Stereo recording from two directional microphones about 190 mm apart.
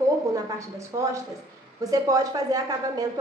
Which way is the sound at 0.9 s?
20° right (ahead or behind).